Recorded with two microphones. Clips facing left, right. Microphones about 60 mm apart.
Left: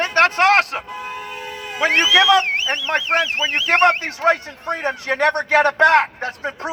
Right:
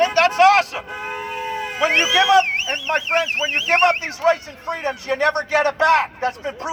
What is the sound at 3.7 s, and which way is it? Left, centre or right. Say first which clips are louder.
A man's voice: left 2 dB; left.